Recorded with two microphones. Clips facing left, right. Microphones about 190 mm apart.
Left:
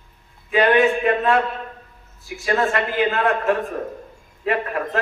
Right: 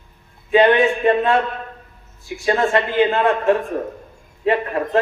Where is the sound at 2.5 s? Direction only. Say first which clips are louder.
Right 3 dB; 25° right (ahead or behind).